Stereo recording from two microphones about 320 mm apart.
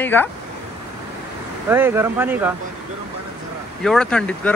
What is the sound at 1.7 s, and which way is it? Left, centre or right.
Speech, centre.